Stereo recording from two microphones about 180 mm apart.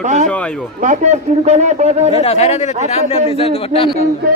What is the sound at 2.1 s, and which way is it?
A man's voice, 35° left (ahead or behind).